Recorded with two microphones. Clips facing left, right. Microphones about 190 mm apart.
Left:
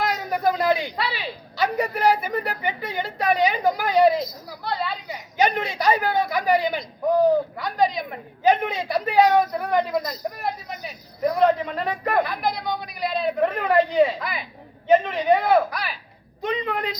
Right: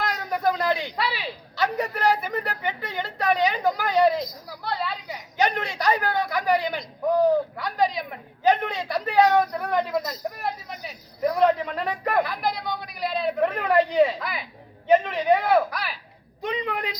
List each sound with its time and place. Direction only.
0.1 s a man's voice: 5° left (ahead or behind)
8.4 s a man's voice: 20° left (ahead or behind)
8.9 s a man's voice: 5° left (ahead or behind)